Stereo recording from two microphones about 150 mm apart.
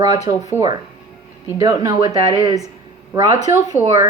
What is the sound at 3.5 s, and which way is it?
Speech, 20° right (ahead or behind).